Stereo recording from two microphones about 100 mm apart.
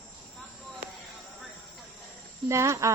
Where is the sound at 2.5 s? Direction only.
30° right (ahead or behind).